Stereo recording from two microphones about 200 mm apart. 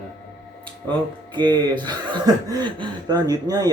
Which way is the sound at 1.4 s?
20° right (ahead or behind).